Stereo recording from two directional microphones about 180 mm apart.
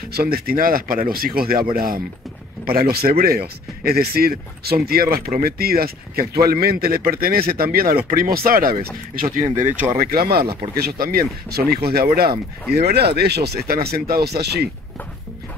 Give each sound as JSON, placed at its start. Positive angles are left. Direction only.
{"t": 0.1, "sound": "speech", "side_deg": -55}
{"t": 9.7, "sound": "speech", "side_deg": -10}
{"t": 9.9, "sound": "speech", "side_deg": -55}
{"t": 10.4, "sound": "speech", "side_deg": -20}
{"t": 10.8, "sound": "speech", "side_deg": -60}